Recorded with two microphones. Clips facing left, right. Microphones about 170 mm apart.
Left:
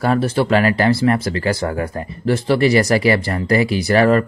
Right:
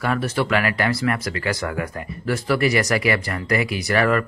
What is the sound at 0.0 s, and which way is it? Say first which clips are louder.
Speech: left 5 dB; 30° left (ahead or behind).